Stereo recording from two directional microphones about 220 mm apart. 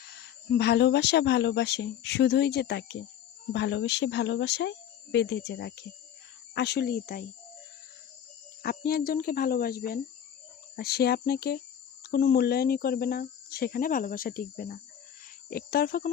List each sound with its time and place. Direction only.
0.5 s speech: 50° left (ahead or behind)
8.6 s speech: 45° left (ahead or behind)